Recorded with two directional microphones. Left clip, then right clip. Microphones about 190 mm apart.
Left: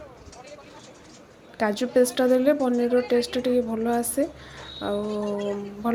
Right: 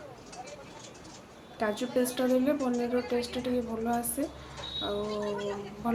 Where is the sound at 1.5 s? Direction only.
35° left (ahead or behind).